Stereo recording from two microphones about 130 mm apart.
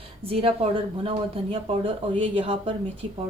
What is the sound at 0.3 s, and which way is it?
A woman's voice, 45° right (ahead or behind).